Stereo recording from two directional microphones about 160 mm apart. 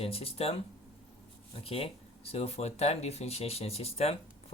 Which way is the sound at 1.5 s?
35° left (ahead or behind).